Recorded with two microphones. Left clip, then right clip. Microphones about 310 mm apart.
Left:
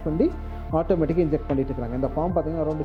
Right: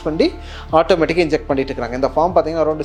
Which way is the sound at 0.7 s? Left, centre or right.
Centre.